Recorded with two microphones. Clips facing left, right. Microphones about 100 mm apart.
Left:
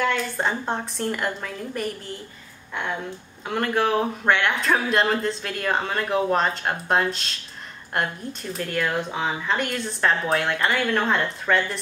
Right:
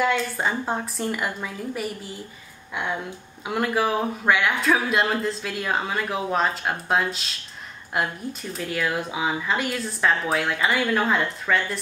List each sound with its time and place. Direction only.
0.0 s speech: centre (ahead or behind)
3.4 s speech: 5° right (ahead or behind)